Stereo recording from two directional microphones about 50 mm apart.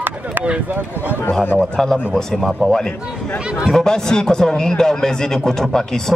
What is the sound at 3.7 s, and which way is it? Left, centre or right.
A man's voice, centre.